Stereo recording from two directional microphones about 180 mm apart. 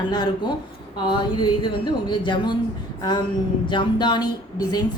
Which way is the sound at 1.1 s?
25° left (ahead or behind).